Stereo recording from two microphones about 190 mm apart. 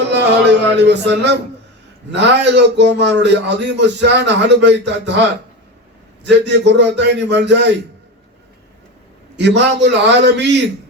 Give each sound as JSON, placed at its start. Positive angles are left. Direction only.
{"t": 0.1, "sound": "music", "side_deg": -65}
{"t": 2.1, "sound": "a man's voice", "side_deg": -65}
{"t": 9.4, "sound": "a man's voice", "side_deg": -65}